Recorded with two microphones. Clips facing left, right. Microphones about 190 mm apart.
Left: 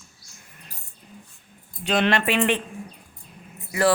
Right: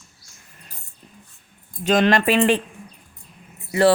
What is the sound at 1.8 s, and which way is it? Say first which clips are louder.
Speech: right 4 dB; 40° right (ahead or behind).